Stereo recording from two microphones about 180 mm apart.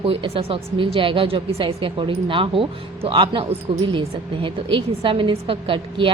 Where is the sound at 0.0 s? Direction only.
30° right (ahead or behind).